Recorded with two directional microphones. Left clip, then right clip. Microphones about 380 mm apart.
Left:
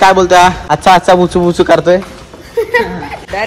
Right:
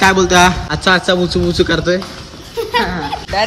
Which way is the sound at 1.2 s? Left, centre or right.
Centre.